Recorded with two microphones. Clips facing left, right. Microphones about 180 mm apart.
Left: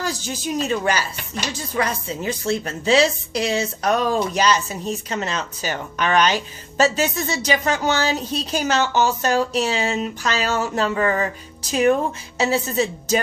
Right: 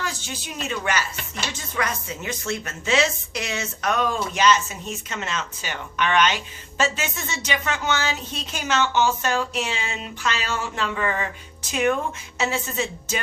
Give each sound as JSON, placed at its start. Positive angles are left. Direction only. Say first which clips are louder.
{"t": 0.0, "sound": "speech", "louder": "left 6 dB", "side_deg": 40}